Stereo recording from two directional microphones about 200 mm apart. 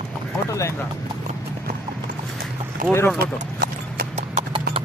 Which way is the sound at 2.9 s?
10° left (ahead or behind).